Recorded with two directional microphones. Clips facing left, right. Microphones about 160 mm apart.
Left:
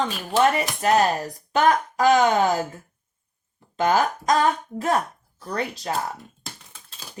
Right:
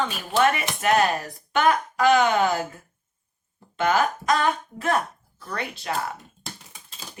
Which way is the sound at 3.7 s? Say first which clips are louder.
Left 1 dB; 40° left (ahead or behind).